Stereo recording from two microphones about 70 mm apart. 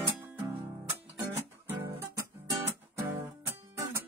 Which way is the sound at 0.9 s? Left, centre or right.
Right.